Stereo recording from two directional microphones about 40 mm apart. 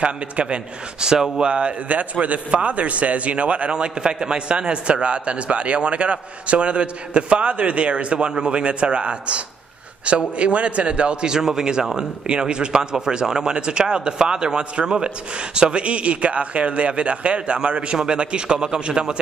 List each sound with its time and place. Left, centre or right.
0.0 s a man's voice: right